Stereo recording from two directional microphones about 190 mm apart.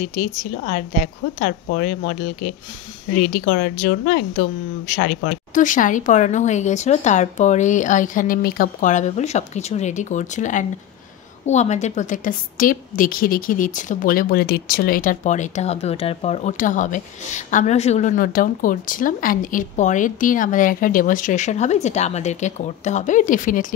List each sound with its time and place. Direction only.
0.1 s a woman's voice: 45° left (ahead or behind)